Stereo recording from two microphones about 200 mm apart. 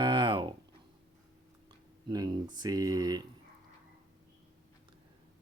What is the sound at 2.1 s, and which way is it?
Speech, 20° right (ahead or behind).